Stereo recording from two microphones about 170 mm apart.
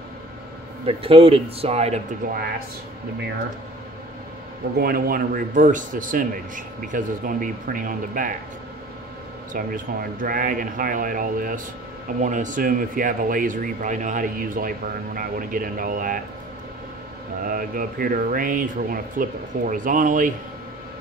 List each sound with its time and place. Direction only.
0.8 s speech: 35° right (ahead or behind)
2.2 s speech: 60° right (ahead or behind)
4.7 s speech: 65° right (ahead or behind)
9.5 s speech: 55° right (ahead or behind)
17.4 s speech: 55° right (ahead or behind)